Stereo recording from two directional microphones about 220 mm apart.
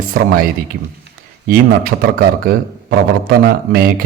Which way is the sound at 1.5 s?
40° right (ahead or behind).